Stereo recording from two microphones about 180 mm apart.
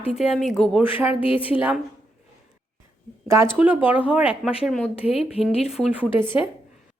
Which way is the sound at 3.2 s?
15° right (ahead or behind).